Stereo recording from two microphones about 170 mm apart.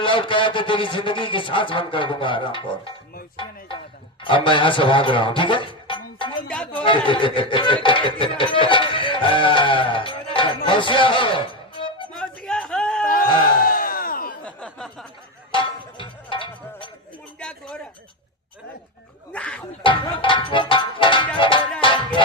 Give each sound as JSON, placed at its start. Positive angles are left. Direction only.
{"t": 0.0, "sound": "speech", "side_deg": 30}
{"t": 6.5, "sound": "speech", "side_deg": 5}
{"t": 6.8, "sound": "music", "side_deg": 30}
{"t": 12.1, "sound": "a sound", "side_deg": 5}
{"t": 13.6, "sound": "crowd", "side_deg": 55}
{"t": 14.4, "sound": "a sound", "side_deg": 5}
{"t": 15.5, "sound": "music", "side_deg": 30}
{"t": 17.4, "sound": "a sound", "side_deg": 5}
{"t": 19.3, "sound": "music", "side_deg": 5}
{"t": 19.8, "sound": "music", "side_deg": 30}